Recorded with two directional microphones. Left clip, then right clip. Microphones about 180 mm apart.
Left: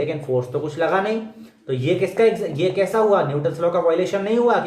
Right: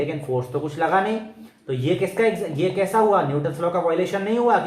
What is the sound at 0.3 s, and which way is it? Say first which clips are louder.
Speech: left 2 dB; 25° right (ahead or behind).